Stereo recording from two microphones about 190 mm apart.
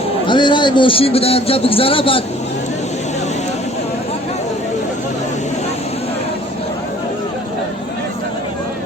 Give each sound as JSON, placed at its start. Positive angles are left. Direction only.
{"t": 0.3, "sound": "a man's voice", "side_deg": 25}